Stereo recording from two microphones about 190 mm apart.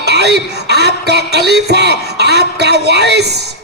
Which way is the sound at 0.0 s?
60° right (ahead or behind).